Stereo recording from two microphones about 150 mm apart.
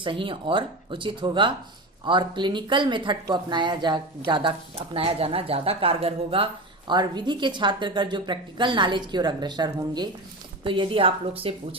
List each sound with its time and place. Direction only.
0.0 s speech: 35° right (ahead or behind)